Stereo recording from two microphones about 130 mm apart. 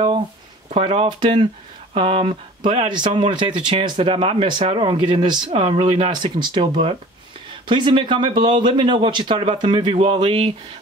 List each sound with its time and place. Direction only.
0.7 s speech: 50° right (ahead or behind)
1.0 s speech: 40° right (ahead or behind)
10.1 s speech: 45° right (ahead or behind)